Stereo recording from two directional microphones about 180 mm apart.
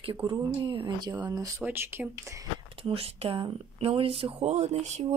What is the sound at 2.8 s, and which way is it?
Speech, 35° right (ahead or behind).